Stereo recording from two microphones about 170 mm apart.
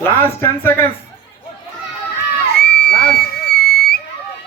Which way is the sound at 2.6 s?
75° left (ahead or behind).